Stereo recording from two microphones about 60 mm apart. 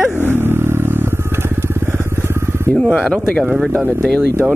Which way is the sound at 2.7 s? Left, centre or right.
Centre.